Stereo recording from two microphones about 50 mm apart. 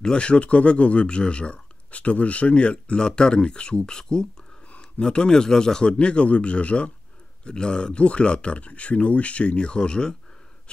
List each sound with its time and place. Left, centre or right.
0.0 s speech: centre